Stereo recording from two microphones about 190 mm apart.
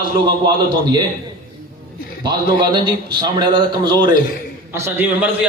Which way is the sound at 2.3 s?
25° right (ahead or behind).